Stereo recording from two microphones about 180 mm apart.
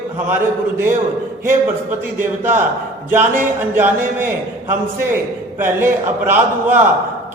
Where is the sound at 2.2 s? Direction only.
10° right (ahead or behind).